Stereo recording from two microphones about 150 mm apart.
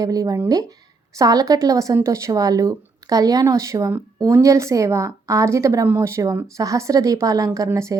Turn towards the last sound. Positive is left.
turn(degrees=-20)  # may be behind; listen again after turning